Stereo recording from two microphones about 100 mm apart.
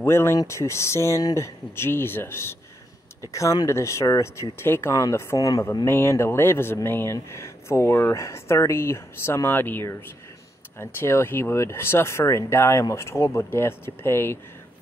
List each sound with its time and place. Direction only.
0.0 s speech: 25° left (ahead or behind)
3.6 s speech: 30° left (ahead or behind)